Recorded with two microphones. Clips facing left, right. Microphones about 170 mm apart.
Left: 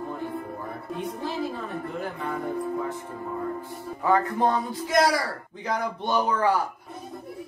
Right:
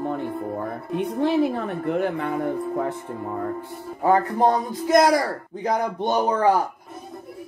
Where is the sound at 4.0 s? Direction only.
35° right (ahead or behind).